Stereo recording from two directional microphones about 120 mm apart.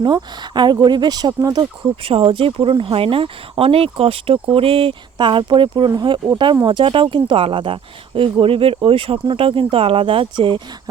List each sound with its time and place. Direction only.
0.0 s speech: 40° right (ahead or behind)
2.0 s speech: 50° right (ahead or behind)